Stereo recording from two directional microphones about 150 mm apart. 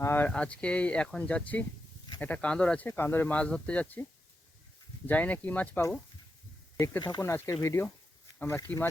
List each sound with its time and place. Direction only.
0.0 s speech: 15° left (ahead or behind)
5.0 s speech: 10° left (ahead or behind)